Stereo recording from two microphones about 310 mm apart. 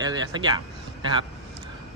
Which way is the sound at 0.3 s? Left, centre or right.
Centre.